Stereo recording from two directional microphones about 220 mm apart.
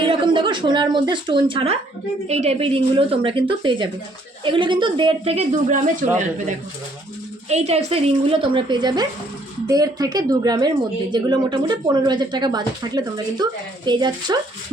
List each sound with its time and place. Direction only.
0.0 s speech: 20° right (ahead or behind)
7.4 s speech: 30° right (ahead or behind)